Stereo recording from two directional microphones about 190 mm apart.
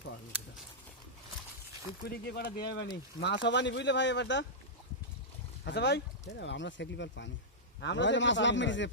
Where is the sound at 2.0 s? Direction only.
55° left (ahead or behind).